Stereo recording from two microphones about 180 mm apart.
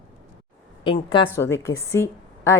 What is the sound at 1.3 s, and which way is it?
Speech, 15° left (ahead or behind).